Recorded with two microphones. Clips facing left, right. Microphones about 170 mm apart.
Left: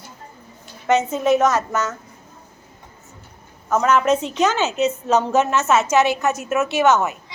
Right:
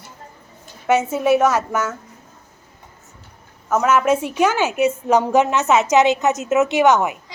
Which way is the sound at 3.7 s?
5° right (ahead or behind).